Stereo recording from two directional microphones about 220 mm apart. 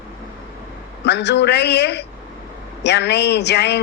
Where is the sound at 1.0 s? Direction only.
50° left (ahead or behind).